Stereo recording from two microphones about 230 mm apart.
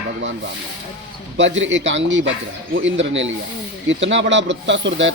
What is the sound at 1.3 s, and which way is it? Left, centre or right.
A man's voice, right.